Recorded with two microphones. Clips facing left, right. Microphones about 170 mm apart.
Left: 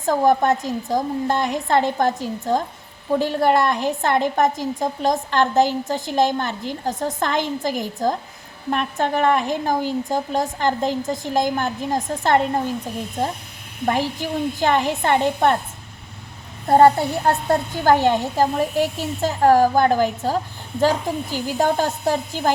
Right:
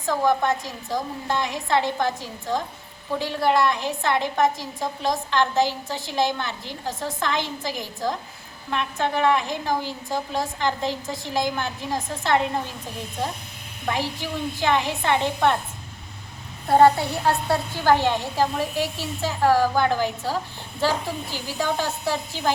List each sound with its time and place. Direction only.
0.0 s a woman's voice: 45° left (ahead or behind)
13.8 s a woman's voice: 45° left (ahead or behind)
16.6 s a woman's voice: 45° left (ahead or behind)